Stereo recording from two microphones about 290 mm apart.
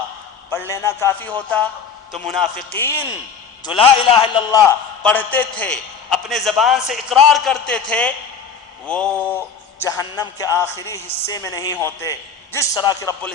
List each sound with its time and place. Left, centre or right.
0.5 s a man's voice: centre
3.7 s a man's voice: centre
5.0 s a man's voice: centre